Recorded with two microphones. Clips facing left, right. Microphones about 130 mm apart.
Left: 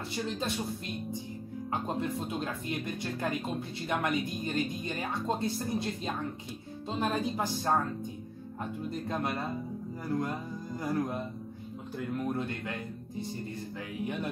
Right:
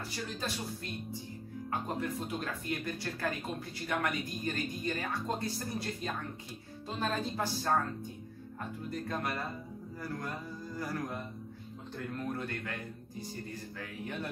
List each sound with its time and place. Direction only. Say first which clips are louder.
1.7 s speech: left 3 dB; 25° left (ahead or behind)
9.0 s speech: left 3 dB; 20° left (ahead or behind)
12.3 s speech: left 4 dB; 20° left (ahead or behind)
14.0 s speech: left 5 dB; 15° left (ahead or behind)